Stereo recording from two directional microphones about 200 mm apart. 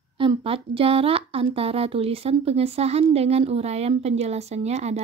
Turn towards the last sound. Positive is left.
turn(degrees=-35)  # may be behind; listen again after turning